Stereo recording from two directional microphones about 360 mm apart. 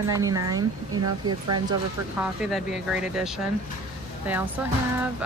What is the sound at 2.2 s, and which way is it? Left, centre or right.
Speech, centre.